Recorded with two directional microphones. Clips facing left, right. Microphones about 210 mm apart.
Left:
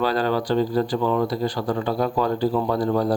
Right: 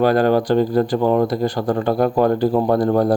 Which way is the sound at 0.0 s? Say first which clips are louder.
Right 7 dB; 50° right (ahead or behind).